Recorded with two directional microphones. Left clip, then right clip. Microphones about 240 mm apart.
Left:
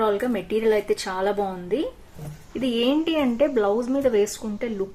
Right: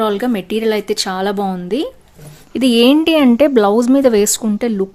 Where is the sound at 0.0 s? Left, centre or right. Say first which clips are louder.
Right 6 dB; right.